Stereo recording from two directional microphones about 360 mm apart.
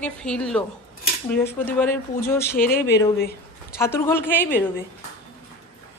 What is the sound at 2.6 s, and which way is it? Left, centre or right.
Speech, left.